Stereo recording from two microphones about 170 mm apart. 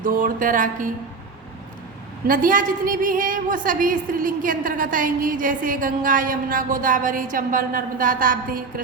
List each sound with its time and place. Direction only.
0.0 s a woman's voice: 55° right (ahead or behind)
2.2 s a woman's voice: 55° right (ahead or behind)